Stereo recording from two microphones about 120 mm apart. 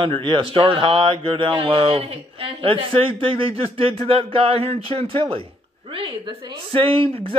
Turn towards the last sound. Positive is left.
turn(degrees=-50)  # may be behind; listen again after turning